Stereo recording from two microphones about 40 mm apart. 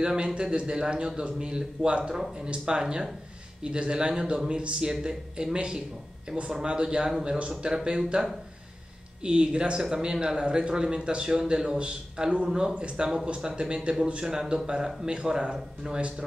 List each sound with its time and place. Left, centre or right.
0.0 s a man's voice: centre
9.2 s a man's voice: right